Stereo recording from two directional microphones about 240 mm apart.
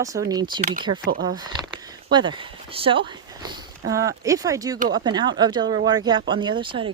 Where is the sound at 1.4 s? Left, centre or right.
Centre.